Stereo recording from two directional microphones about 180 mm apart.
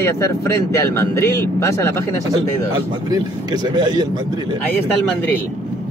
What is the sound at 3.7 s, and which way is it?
Speech, 25° right (ahead or behind).